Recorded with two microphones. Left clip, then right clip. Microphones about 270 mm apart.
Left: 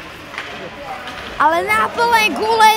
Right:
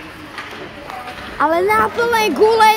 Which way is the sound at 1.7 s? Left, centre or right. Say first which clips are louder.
Left 1 dB; centre.